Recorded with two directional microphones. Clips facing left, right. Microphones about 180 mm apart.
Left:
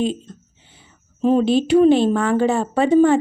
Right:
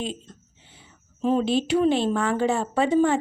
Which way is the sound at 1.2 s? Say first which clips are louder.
Left 6 dB; 40° left (ahead or behind).